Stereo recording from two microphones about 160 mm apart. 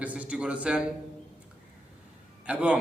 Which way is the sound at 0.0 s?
10° right (ahead or behind).